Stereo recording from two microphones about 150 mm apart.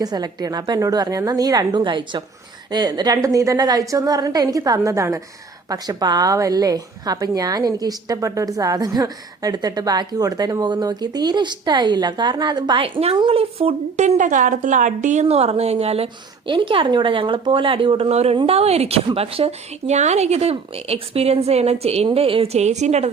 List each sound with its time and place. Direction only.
0.0 s a woman's voice: 25° right (ahead or behind); by 23.0 s 50° right (ahead or behind)